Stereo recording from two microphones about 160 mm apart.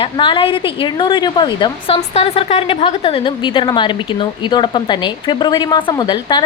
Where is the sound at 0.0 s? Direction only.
30° left (ahead or behind).